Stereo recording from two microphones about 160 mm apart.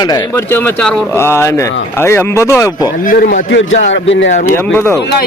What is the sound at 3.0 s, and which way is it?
Speech, 60° left (ahead or behind).